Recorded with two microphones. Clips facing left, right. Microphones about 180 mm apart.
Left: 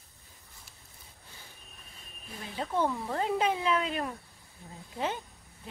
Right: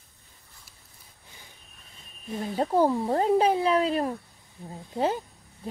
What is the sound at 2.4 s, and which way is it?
Speech, 40° right (ahead or behind).